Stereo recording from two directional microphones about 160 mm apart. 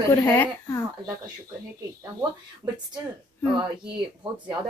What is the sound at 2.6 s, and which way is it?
Speech, 20° right (ahead or behind).